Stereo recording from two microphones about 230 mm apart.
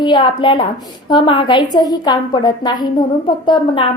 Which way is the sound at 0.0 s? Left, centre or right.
Centre.